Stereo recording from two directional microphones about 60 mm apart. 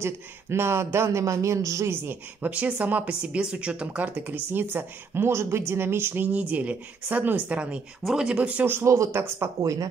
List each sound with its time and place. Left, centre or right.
0.0 s speech: right
2.4 s speech: right
8.0 s speech: centre
8.3 s speech: right
8.8 s speech: right
9.6 s speech: right